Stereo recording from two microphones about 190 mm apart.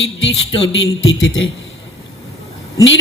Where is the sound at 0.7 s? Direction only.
75° left (ahead or behind).